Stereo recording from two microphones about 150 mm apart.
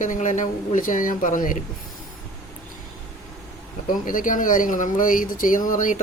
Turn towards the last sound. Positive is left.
turn(degrees=60)  # may be behind; listen again after turning